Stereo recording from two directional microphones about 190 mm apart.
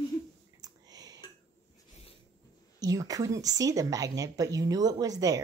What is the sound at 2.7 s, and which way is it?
A woman's voice, 20° right (ahead or behind).